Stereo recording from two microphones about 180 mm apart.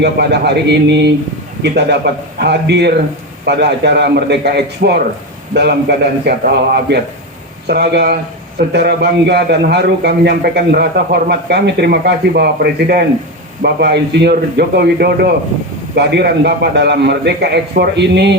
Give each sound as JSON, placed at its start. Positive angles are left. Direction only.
{"t": 0.0, "sound": "a man's voice", "side_deg": -70}